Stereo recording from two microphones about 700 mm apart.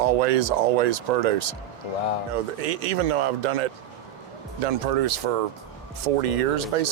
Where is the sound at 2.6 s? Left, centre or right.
Right.